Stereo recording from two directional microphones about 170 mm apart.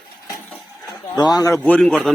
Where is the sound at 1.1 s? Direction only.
20° left (ahead or behind).